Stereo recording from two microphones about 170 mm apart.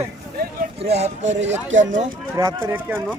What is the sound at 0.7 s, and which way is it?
Speech, 40° right (ahead or behind).